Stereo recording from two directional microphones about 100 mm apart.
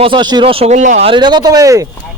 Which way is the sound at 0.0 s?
55° right (ahead or behind).